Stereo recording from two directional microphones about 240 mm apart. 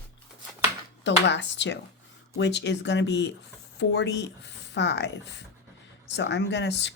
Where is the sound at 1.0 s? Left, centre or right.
Left.